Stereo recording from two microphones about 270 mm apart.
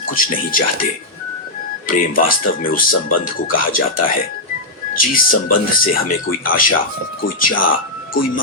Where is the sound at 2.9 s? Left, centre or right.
Left.